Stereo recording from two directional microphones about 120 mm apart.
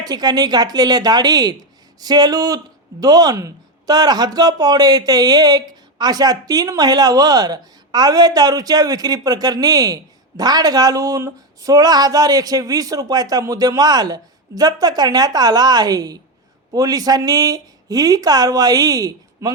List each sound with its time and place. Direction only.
0.0 s speech: 35° right (ahead or behind)